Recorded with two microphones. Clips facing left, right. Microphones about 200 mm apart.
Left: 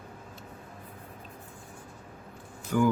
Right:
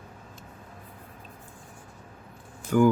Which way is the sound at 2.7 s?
50° right (ahead or behind).